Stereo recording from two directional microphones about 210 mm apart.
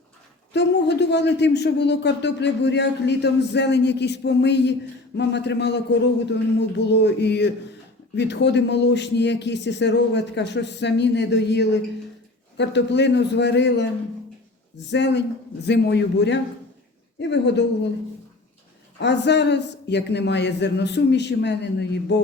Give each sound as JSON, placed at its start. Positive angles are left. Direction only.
{"t": 0.5, "sound": "a man's voice", "side_deg": 55}
{"t": 14.8, "sound": "a man's voice", "side_deg": 55}
{"t": 18.9, "sound": "a man's voice", "side_deg": 55}